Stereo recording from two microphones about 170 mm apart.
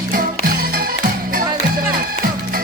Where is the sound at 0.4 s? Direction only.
60° right (ahead or behind).